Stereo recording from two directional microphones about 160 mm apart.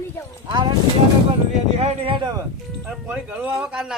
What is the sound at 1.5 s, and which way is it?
Speech, 40° right (ahead or behind).